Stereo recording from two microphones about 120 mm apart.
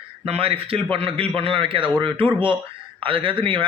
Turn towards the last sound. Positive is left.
turn(degrees=-45)  # may be behind; listen again after turning